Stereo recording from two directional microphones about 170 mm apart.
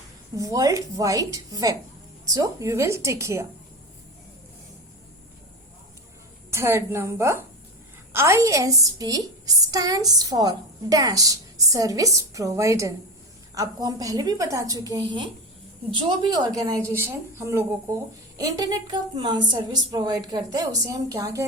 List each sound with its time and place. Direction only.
0.3 s a woman's voice: 20° right (ahead or behind)
6.5 s a woman's voice: 15° right (ahead or behind)